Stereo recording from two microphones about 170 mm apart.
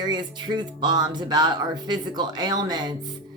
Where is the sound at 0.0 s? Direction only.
25° right (ahead or behind).